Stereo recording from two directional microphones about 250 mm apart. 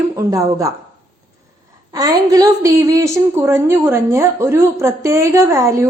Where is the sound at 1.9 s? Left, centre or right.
Centre.